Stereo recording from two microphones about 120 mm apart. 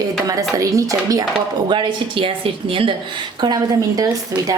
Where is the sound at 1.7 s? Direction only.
45° right (ahead or behind).